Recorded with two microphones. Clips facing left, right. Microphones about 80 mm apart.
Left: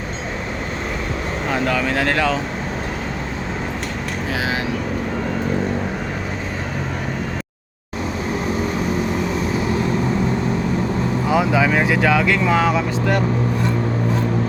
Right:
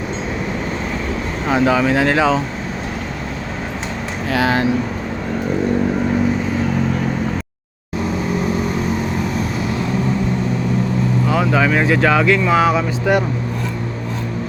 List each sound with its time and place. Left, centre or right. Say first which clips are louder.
1.5 s speech: right 6 dB; centre
4.4 s vehicle: right 8 dB; right
11.3 s speech: even; centre